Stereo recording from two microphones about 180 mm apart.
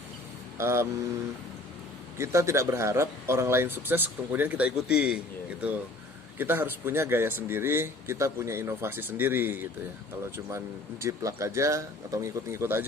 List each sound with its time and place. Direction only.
0.6 s a man's voice: 15° right (ahead or behind)
2.1 s a man's voice: 15° right (ahead or behind)
11.0 s a man's voice: 15° right (ahead or behind)